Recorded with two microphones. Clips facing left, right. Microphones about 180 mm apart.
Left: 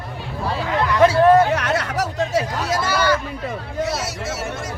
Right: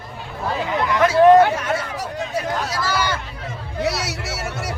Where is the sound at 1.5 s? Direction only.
80° left.